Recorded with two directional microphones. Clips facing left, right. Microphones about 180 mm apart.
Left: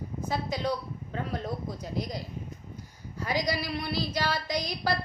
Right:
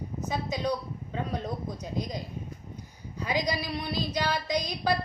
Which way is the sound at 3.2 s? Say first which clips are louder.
Even; 15° right (ahead or behind).